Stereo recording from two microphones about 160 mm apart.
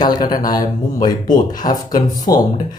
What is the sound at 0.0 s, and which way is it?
Speech, 25° left (ahead or behind).